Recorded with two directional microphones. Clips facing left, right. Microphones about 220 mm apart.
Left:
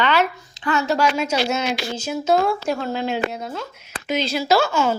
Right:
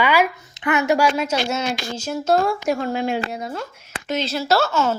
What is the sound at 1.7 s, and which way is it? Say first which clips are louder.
Speech: left 1 dB; 50° right (ahead or behind).